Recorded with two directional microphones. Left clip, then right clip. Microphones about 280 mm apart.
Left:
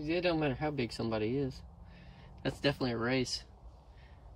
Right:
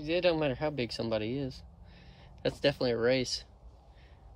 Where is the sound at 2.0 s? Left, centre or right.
Right.